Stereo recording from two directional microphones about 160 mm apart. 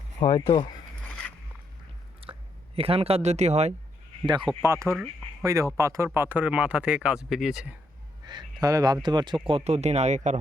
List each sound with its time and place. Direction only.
0.2 s speech: 30° left (ahead or behind)
2.3 s a sound: 30° right (ahead or behind)
2.7 s speech: 35° right (ahead or behind)
4.2 s speech: 30° right (ahead or behind)
4.6 s speech: 15° right (ahead or behind)
8.2 s speech: 25° right (ahead or behind); by 10.3 s 45° right (ahead or behind)